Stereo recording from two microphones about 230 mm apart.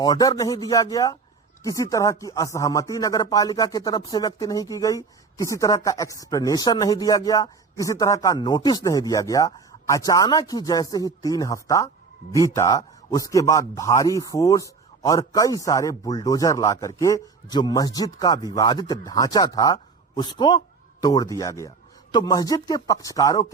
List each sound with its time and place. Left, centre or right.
0.0 s speech: centre